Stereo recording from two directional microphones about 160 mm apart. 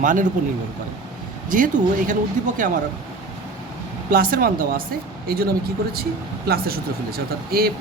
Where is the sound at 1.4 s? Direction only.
55° right (ahead or behind).